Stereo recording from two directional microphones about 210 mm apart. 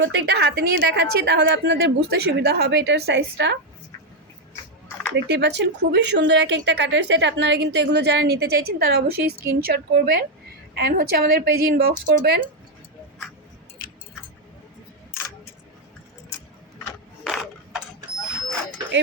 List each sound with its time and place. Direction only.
0.0 s a woman's voice: 60° right (ahead or behind)
5.1 s a woman's voice: 55° right (ahead or behind)
17.2 s mechanisms: centre (ahead or behind)